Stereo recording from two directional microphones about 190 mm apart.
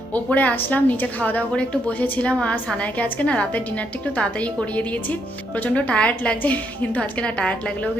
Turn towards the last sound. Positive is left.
turn(degrees=5)  # may be behind; listen again after turning